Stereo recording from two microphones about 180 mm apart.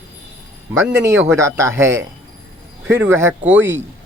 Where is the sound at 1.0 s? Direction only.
15° right (ahead or behind).